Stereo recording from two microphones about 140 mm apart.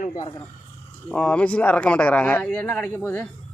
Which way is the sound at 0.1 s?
30° left (ahead or behind).